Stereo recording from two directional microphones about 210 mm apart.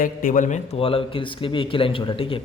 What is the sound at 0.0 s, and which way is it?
A man's voice, 40° left (ahead or behind).